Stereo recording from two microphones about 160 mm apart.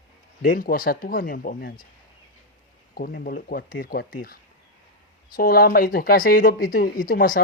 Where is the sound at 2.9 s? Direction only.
70° left (ahead or behind).